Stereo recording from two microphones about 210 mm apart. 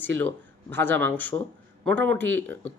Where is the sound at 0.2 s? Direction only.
10° left (ahead or behind).